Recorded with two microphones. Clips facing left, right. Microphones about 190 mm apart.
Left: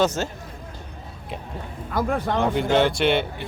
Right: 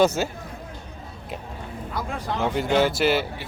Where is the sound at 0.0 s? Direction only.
10° right (ahead or behind).